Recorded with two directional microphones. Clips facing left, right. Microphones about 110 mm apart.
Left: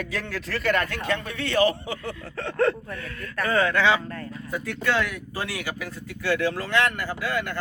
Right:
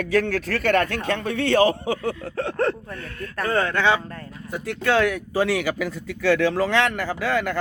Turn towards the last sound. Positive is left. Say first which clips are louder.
# right 5 dB
turn(degrees=-90)